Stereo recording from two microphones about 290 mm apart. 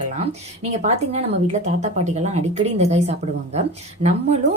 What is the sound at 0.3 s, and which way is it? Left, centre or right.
Speech, right.